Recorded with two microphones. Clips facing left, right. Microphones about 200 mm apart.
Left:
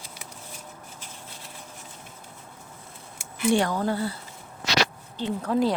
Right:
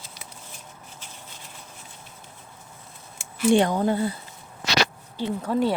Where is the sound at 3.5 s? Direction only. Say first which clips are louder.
Right 4 dB; 20° right (ahead or behind).